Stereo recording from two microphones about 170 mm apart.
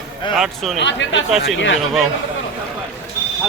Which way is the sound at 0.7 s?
90° left.